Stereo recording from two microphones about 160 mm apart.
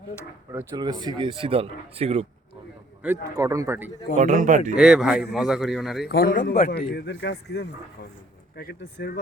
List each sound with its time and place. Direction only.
0.8 s speech: 25° right (ahead or behind)
3.0 s speech: 15° right (ahead or behind)
4.1 s a man's voice: 50° right (ahead or behind)
4.7 s speech: 5° right (ahead or behind)
6.1 s speech: 70° left (ahead or behind); by 6.7 s 55° left (ahead or behind)
6.7 s a man's voice: 90° left